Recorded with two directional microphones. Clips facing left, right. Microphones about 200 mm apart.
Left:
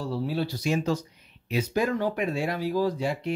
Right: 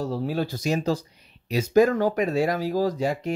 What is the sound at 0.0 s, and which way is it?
Speech, 45° right (ahead or behind).